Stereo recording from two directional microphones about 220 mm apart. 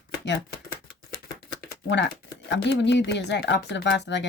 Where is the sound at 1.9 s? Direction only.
55° left (ahead or behind).